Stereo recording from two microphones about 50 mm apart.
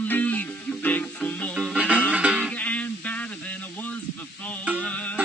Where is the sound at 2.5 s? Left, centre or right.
Left.